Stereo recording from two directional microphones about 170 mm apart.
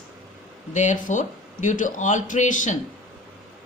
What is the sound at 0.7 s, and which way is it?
A woman's voice, 45° left (ahead or behind).